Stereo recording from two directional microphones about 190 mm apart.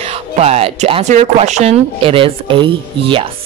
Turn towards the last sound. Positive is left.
turn(degrees=-25)  # may be behind; listen again after turning